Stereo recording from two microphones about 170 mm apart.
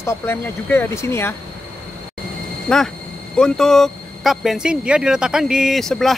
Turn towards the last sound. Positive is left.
turn(degrees=0)  # may be behind; listen again after turning